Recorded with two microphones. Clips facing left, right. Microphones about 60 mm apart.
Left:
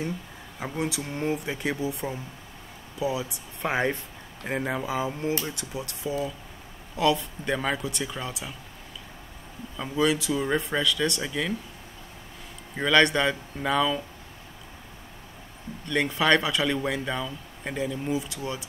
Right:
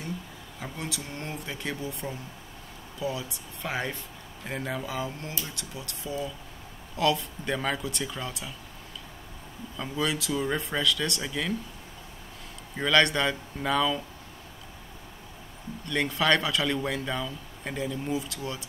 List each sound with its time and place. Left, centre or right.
0.6 s speech: centre
3.6 s speech: left
7.0 s speech: centre
9.8 s speech: centre
12.7 s speech: centre
15.9 s speech: centre